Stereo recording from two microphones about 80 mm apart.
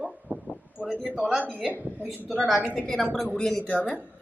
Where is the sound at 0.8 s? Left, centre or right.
Centre.